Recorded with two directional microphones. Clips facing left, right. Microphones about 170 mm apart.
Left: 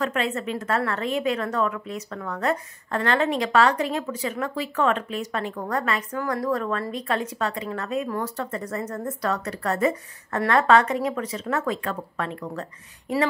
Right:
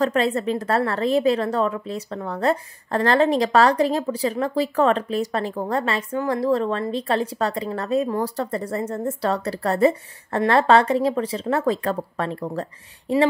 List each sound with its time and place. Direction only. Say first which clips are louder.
0.0 s a woman's voice: right 5 dB; 35° right (ahead or behind)